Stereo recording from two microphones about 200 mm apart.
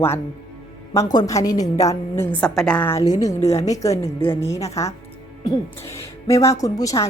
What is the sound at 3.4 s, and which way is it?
Speech, 30° left (ahead or behind).